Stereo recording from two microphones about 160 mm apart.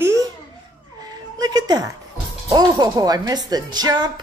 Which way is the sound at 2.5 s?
25° right (ahead or behind).